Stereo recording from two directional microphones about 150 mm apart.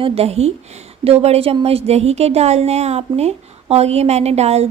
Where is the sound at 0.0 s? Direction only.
40° right (ahead or behind).